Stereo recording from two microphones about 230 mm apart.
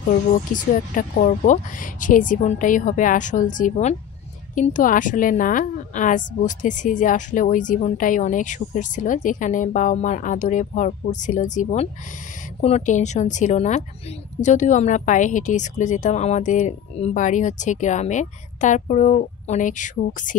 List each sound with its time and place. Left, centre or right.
0.5 s a woman's voice: left